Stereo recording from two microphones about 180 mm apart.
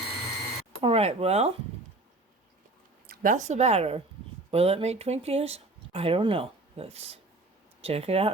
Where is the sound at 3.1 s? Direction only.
45° right (ahead or behind).